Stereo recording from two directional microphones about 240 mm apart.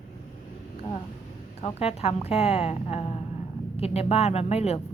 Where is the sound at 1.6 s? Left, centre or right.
Left.